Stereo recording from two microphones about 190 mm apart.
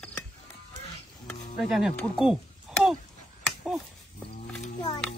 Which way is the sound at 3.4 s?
Centre (ahead or behind).